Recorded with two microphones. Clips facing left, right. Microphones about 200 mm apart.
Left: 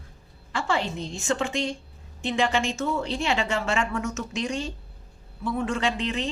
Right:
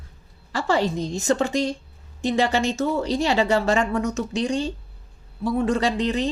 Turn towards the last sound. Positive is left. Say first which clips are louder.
# right 5 dB
turn(degrees=-35)  # may be behind; listen again after turning